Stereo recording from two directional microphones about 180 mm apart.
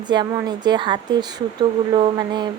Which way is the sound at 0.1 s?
25° right (ahead or behind).